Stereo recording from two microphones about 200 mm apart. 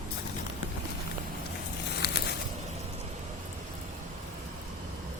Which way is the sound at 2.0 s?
55° left (ahead or behind).